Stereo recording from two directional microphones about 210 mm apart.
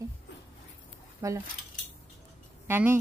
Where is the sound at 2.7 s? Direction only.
10° right (ahead or behind).